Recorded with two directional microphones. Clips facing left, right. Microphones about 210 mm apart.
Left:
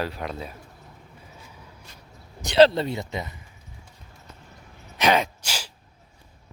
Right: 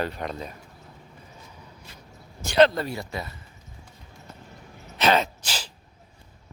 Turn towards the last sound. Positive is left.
turn(degrees=10)  # may be behind; listen again after turning